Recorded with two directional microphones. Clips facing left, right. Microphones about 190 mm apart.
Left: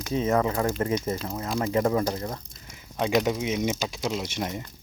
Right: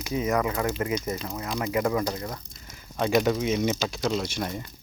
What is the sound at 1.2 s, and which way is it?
Speech, 20° left (ahead or behind).